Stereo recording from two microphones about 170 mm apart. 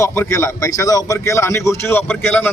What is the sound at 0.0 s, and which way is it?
A man's voice, 15° left (ahead or behind).